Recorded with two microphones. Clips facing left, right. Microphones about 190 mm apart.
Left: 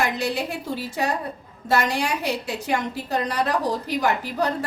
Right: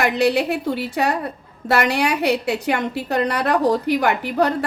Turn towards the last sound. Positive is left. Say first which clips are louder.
# right 4 dB
turn(degrees=-65)  # may be behind; listen again after turning